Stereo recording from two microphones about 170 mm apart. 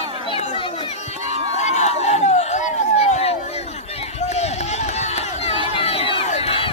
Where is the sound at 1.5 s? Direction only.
45° left (ahead or behind).